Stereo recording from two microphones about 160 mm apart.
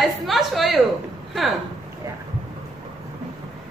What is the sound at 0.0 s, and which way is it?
Speech, centre (ahead or behind).